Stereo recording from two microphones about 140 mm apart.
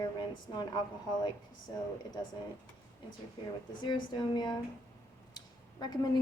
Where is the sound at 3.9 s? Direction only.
30° left (ahead or behind).